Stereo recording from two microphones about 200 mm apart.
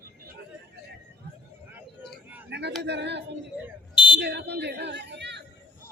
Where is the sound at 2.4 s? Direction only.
60° right (ahead or behind).